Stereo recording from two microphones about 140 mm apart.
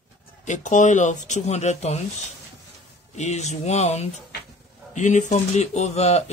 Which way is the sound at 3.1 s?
55° left (ahead or behind).